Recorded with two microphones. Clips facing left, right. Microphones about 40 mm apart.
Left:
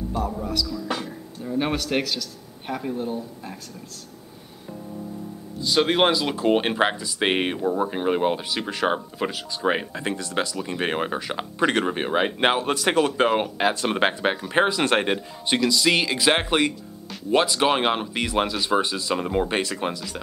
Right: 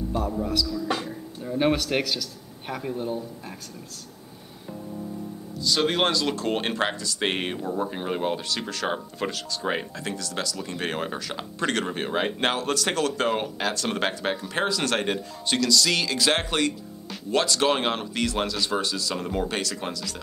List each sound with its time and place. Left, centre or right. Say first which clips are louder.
0.1 s speech: right 1 dB; centre
5.8 s speech: left 4 dB; centre